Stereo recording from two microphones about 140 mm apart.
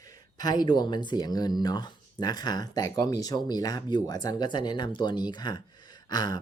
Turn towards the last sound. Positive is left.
turn(degrees=30)  # may be behind; listen again after turning